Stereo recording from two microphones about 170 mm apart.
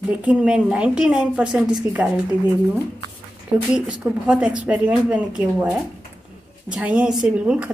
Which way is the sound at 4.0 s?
5° right (ahead or behind).